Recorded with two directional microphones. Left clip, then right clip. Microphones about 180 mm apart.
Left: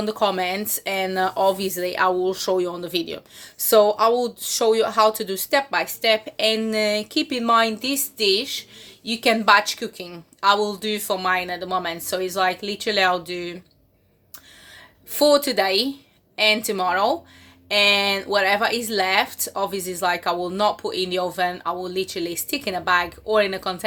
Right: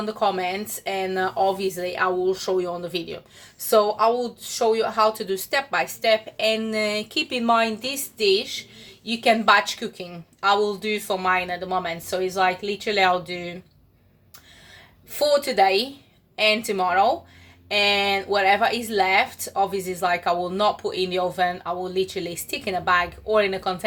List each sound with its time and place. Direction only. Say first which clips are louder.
0.0 s speech: left 2 dB; 50° left (ahead or behind)
15.1 s speech: left 3 dB; 40° left (ahead or behind)